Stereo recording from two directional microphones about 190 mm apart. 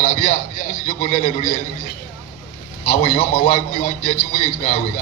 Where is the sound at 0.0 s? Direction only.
45° left (ahead or behind).